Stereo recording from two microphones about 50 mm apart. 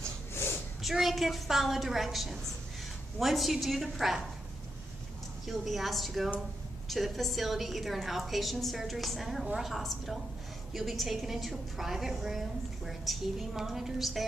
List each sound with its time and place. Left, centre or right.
0.3 s a sound: left
0.8 s a woman's voice: centre
5.5 s a woman's voice: centre